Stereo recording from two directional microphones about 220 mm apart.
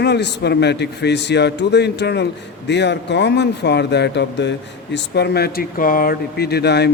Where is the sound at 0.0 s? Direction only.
50° left (ahead or behind).